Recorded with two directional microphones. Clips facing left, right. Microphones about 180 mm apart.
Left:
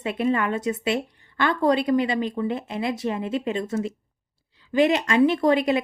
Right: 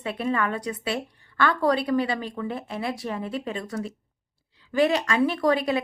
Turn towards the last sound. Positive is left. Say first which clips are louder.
# left 3 dB
turn(degrees=20)  # may be behind; listen again after turning